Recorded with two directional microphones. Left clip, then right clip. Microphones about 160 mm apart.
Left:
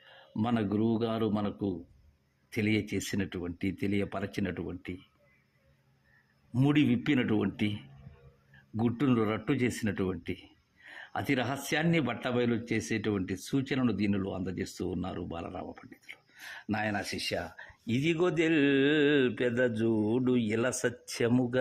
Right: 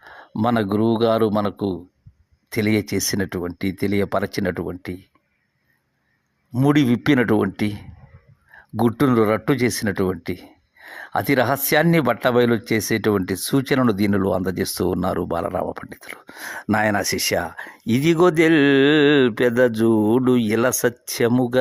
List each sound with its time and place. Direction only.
0.3 s speech: 45° right (ahead or behind)
2.5 s speech: 40° right (ahead or behind)
6.5 s speech: 40° right (ahead or behind)